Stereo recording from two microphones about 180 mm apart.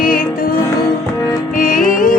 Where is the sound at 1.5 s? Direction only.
50° left (ahead or behind).